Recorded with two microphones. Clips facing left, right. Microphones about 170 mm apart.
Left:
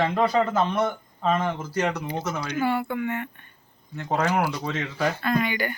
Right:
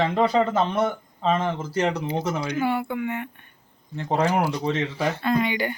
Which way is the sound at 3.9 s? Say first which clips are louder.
Right 2 dB; 30° right (ahead or behind).